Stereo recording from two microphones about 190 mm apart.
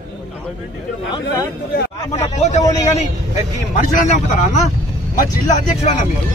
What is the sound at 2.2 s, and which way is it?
Speech, 35° left (ahead or behind).